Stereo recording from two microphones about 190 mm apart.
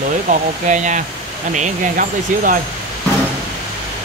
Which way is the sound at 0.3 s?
40° right (ahead or behind).